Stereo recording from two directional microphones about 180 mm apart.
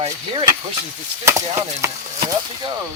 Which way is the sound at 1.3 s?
15° right (ahead or behind).